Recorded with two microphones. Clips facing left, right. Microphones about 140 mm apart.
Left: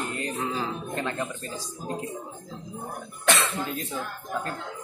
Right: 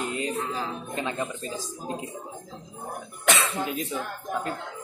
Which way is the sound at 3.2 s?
15° right (ahead or behind).